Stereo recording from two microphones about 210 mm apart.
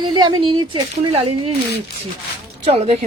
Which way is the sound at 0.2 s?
20° right (ahead or behind).